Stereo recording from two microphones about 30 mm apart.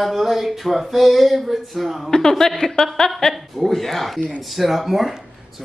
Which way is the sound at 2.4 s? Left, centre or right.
Centre.